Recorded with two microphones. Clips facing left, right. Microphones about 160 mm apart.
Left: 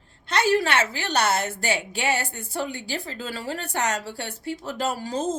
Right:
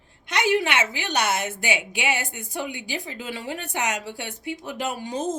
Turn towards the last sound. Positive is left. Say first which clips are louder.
# left 1 dB
turn(degrees=-20)  # may be behind; listen again after turning